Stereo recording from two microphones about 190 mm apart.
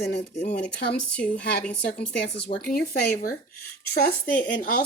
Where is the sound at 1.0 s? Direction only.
5° left (ahead or behind).